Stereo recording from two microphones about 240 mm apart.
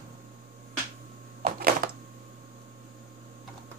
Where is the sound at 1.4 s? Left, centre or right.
Right.